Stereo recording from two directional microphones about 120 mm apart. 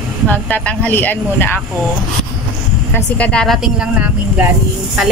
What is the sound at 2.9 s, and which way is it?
Speech, 10° left (ahead or behind).